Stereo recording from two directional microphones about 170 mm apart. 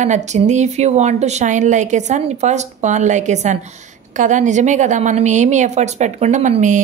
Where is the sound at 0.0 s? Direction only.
45° right (ahead or behind).